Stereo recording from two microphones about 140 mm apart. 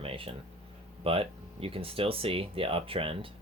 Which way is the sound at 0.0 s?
40° right (ahead or behind).